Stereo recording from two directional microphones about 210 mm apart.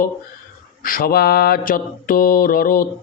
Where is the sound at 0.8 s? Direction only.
40° left (ahead or behind).